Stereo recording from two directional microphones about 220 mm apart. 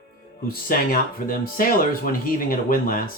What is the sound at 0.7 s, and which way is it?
Speech, 40° left (ahead or behind).